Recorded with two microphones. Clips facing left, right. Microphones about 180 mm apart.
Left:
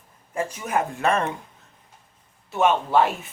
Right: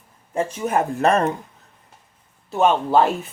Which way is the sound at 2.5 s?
35° right (ahead or behind).